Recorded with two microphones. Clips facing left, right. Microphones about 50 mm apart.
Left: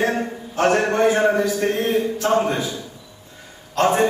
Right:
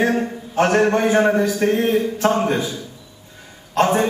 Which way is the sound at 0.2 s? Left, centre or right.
Right.